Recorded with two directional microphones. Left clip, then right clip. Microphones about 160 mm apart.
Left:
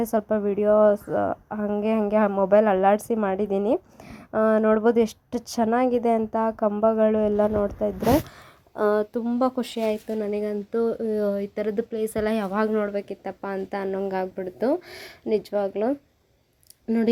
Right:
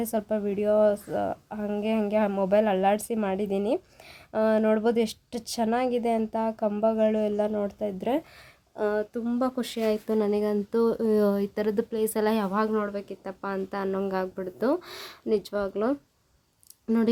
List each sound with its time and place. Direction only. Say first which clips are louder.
0.0 s a woman's voice: left 5 dB; 5° left (ahead or behind)
8.7 s a woman's voice: left 5 dB; 20° left (ahead or behind); by 16.0 s 5° left (ahead or behind)